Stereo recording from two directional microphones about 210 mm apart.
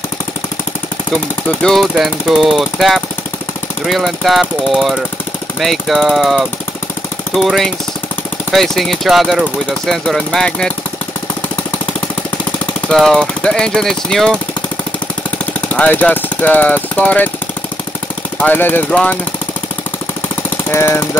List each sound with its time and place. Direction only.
1.6 s speech: centre (ahead or behind)
12.8 s speech: 5° left (ahead or behind)
15.3 s speech: 5° left (ahead or behind)
18.4 s speech: 10° left (ahead or behind)
20.4 s speech: 10° left (ahead or behind)